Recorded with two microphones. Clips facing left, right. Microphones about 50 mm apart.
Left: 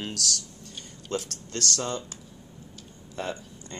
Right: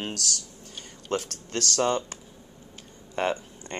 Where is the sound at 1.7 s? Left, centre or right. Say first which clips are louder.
Right 9 dB; right.